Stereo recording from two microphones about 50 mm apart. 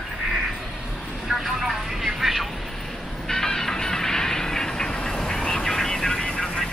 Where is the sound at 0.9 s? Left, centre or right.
Centre.